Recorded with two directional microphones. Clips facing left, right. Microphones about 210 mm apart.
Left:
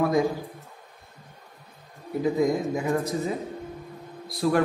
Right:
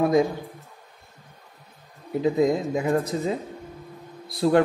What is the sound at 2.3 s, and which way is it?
A man's voice, 25° right (ahead or behind).